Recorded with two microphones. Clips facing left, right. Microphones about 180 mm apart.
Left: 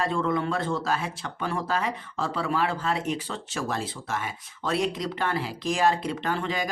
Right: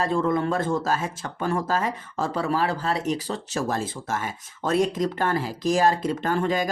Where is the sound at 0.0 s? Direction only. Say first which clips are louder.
Right 3 dB; 40° right (ahead or behind).